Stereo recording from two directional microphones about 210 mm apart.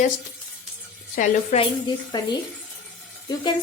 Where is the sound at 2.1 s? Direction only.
20° left (ahead or behind).